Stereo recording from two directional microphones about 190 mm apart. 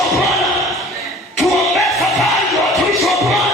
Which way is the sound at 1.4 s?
Centre (ahead or behind).